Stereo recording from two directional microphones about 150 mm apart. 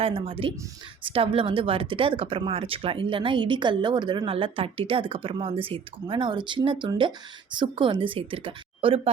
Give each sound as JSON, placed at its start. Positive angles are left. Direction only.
{"t": 0.0, "sound": "speech", "side_deg": -40}